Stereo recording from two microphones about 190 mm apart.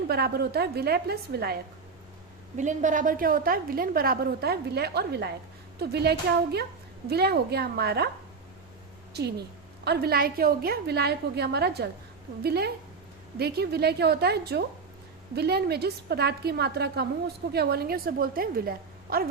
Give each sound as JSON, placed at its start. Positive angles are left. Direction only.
{"t": 0.1, "sound": "a woman's voice", "side_deg": -55}
{"t": 2.6, "sound": "a woman's voice", "side_deg": -40}
{"t": 9.8, "sound": "a woman's voice", "side_deg": -55}